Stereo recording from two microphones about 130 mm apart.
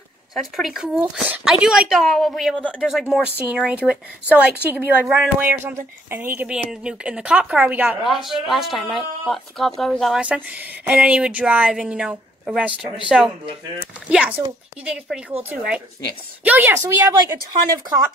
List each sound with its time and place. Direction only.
0.3 s a woman's voice: centre (ahead or behind)
10.2 s a woman's voice: 10° right (ahead or behind)